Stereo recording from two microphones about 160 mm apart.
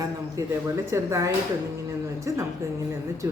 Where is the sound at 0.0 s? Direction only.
20° right (ahead or behind).